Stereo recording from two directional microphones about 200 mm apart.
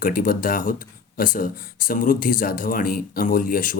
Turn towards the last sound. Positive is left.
turn(degrees=45)  # may be behind; listen again after turning